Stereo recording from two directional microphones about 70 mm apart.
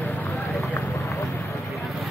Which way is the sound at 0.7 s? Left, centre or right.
Left.